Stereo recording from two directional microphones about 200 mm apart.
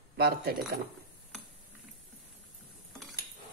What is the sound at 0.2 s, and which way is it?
Speech, 50° right (ahead or behind).